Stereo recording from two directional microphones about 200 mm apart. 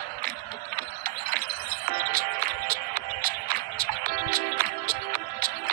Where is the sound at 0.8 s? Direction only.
50° right (ahead or behind).